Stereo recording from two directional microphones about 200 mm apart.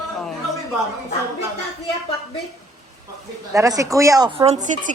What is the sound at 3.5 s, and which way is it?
A woman's voice, 15° right (ahead or behind).